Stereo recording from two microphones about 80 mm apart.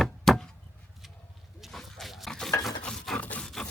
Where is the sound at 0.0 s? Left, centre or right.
Centre.